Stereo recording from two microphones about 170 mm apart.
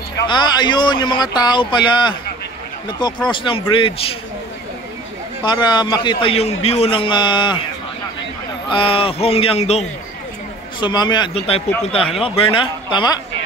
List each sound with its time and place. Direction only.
0.3 s a man's voice: 25° left (ahead or behind)
5.4 s a man's voice: 25° left (ahead or behind)
8.6 s speech: 30° left (ahead or behind)
10.8 s a man's voice: 25° left (ahead or behind)